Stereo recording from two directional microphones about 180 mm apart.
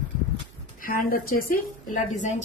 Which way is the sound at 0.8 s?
50° left (ahead or behind).